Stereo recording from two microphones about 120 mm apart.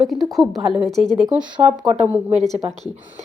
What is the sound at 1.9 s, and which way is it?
Speech, 15° right (ahead or behind).